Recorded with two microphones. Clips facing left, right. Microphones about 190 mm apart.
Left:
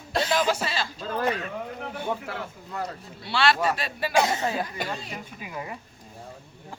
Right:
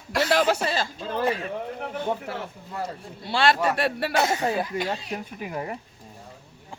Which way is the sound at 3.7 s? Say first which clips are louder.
Right 5 dB; 65° right (ahead or behind).